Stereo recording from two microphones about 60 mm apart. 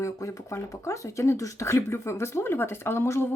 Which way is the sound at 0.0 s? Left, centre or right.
Left.